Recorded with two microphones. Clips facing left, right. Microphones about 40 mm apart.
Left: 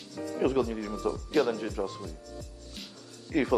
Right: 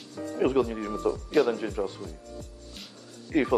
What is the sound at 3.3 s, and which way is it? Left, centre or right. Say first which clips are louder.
Speech: right 2 dB; right.